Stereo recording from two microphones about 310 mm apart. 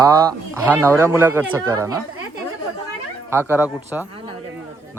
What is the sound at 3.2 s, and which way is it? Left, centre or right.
Speech, centre.